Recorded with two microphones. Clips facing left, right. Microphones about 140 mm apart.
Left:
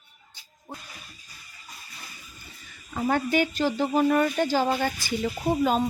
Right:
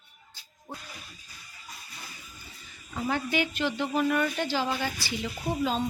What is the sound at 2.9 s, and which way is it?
Speech, 45° left (ahead or behind).